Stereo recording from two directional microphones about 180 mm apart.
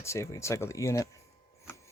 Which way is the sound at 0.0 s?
15° left (ahead or behind).